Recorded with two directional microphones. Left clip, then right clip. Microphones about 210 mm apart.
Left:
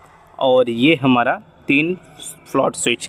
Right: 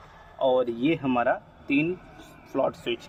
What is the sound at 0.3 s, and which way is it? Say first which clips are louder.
Speech: left 9 dB; 40° left (ahead or behind).